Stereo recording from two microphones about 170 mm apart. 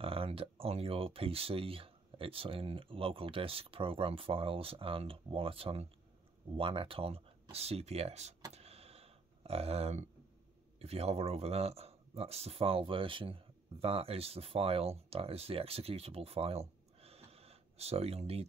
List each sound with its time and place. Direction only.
0.0 s speech: 35° right (ahead or behind)
8.5 s power windows: 35° right (ahead or behind)
10.8 s speech: 35° right (ahead or behind)